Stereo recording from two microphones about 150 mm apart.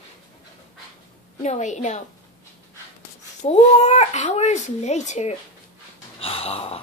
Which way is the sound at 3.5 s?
50° left (ahead or behind).